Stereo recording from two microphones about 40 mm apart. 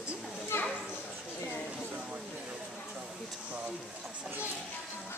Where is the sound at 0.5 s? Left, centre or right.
Left.